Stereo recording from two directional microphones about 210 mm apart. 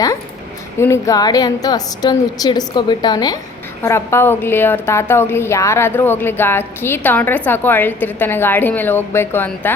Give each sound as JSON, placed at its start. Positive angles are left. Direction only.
{"t": 0.8, "sound": "a woman's voice", "side_deg": 15}